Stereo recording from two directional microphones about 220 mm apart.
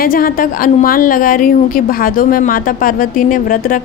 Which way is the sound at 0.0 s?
40° left (ahead or behind).